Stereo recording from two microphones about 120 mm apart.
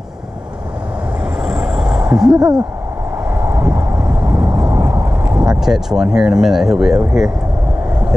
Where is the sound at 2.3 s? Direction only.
35° right (ahead or behind).